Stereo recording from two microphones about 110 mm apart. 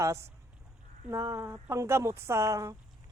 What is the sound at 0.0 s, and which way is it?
Speech, 25° right (ahead or behind).